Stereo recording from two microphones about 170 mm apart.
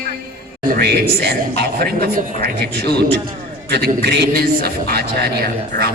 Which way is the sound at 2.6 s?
70° right (ahead or behind).